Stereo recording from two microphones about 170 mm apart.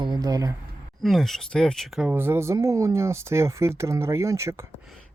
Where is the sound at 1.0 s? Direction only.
Centre (ahead or behind); by 4.6 s 15° right (ahead or behind).